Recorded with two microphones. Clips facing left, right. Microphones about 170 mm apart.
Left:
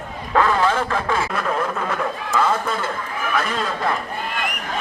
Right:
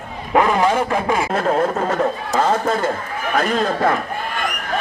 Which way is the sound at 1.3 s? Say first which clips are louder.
Right 5 dB; 40° right (ahead or behind).